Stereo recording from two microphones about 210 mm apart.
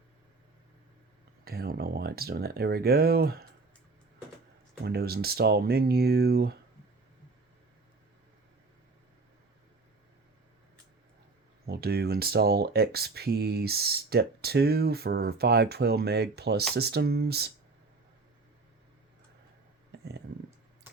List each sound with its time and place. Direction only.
1.5 s speech: 45° right (ahead or behind)
4.8 s speech: 50° right (ahead or behind)
11.6 s speech: 45° right (ahead or behind)
19.9 s a sound: 50° right (ahead or behind)